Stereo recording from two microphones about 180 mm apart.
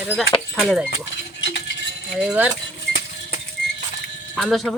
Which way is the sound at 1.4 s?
80° left.